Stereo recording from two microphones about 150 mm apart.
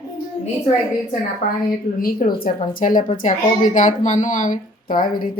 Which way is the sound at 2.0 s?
70° left (ahead or behind).